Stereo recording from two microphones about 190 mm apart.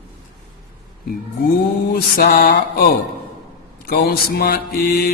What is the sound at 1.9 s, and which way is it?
Mantra, 50° left (ahead or behind).